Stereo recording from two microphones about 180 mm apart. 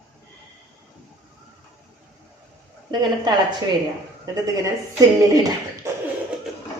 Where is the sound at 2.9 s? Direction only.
25° right (ahead or behind).